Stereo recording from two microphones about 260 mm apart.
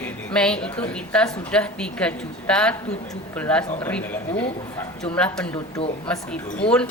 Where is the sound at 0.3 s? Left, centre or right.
Centre.